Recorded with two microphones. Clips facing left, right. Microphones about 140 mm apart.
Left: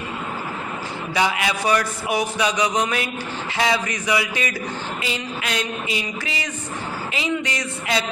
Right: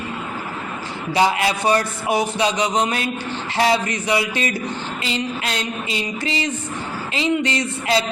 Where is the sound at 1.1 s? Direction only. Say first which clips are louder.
Right 4 dB; 30° right (ahead or behind).